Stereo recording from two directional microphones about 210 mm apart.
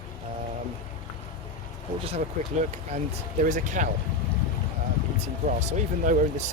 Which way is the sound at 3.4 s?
35° right (ahead or behind).